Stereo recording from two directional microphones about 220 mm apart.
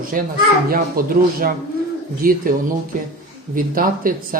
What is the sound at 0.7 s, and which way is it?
Speech, 40° right (ahead or behind).